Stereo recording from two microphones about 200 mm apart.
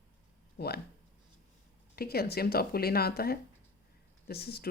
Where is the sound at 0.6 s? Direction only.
55° left (ahead or behind).